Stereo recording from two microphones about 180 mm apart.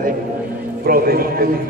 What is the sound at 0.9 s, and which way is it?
Speech, 55° right (ahead or behind).